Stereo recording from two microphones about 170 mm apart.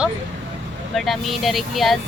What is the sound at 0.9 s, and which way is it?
Speech, centre (ahead or behind).